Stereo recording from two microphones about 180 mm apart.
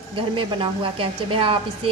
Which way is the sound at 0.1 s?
30° right (ahead or behind).